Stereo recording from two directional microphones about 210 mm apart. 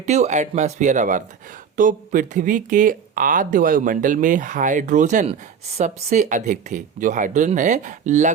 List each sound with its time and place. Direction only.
0.0 s speech: 35° right (ahead or behind)